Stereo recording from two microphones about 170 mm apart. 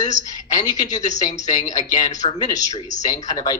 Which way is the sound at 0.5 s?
20° left (ahead or behind).